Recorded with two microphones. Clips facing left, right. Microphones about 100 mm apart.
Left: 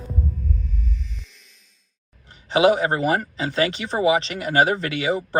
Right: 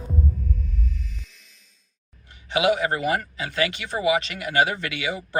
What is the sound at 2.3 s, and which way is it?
Speech, 35° left (ahead or behind).